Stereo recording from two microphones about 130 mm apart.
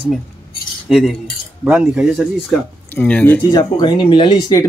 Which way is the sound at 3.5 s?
35° left (ahead or behind).